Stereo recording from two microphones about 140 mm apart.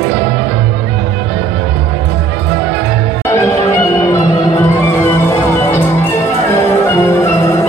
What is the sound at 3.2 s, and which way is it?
Music, 20° left (ahead or behind).